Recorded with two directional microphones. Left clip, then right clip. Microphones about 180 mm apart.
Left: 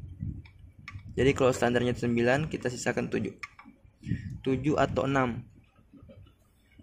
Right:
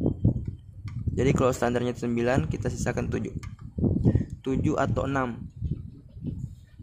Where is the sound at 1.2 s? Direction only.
5° right (ahead or behind).